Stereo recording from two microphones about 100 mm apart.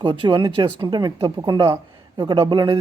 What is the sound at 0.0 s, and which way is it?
Speech, 55° right (ahead or behind).